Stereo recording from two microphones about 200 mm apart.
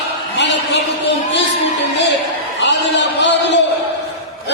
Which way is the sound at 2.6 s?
60° left (ahead or behind).